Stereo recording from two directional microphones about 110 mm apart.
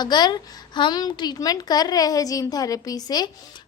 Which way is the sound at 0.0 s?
40° left (ahead or behind).